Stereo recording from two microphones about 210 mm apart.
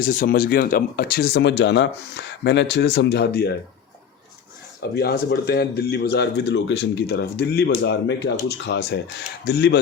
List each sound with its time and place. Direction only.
0.0 s speech: 40° left (ahead or behind)
4.8 s speech: 45° left (ahead or behind)